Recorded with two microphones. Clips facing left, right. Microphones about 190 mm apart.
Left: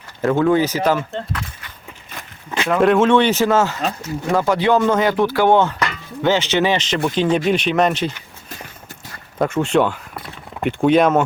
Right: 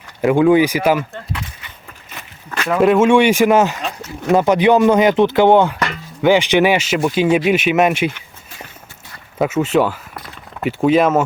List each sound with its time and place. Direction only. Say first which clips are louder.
0.2 s speech: right 4 dB; 15° right (ahead or behind)
2.6 s speech: right 2 dB; centre (ahead or behind)
9.4 s speech: right 1 dB; 5° right (ahead or behind)